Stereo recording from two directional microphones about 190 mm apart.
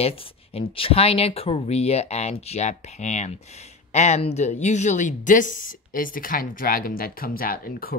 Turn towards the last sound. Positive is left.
turn(degrees=50)  # may be behind; listen again after turning